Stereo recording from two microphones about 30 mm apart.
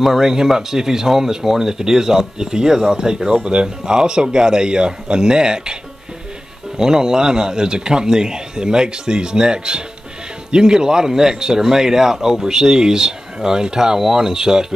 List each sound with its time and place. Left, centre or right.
0.0 s speech: centre
6.8 s speech: right